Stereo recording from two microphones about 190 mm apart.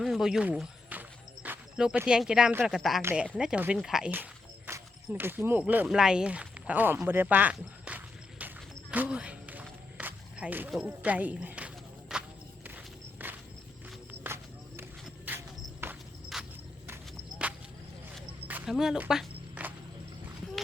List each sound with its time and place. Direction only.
0.0 s speech: centre (ahead or behind)
3.0 s speech: 10° right (ahead or behind)
3.3 s a sound: 5° right (ahead or behind)
12.6 s walk: 10° right (ahead or behind)
14.3 s music: 10° right (ahead or behind)
15.3 s a sound: 10° right (ahead or behind)
16.3 s walk: 10° right (ahead or behind)